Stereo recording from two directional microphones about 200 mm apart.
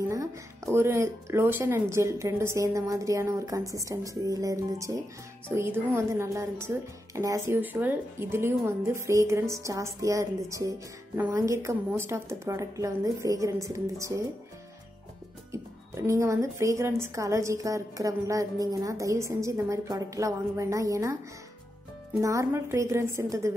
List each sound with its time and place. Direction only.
0.1 s a woman's voice: 15° right (ahead or behind)
15.5 s a woman's voice: 15° right (ahead or behind)
22.2 s a woman's voice: 15° right (ahead or behind)